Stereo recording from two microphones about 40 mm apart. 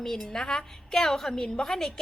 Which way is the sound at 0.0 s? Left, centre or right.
Centre.